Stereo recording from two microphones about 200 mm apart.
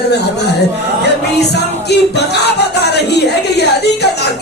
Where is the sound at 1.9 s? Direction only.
55° left (ahead or behind).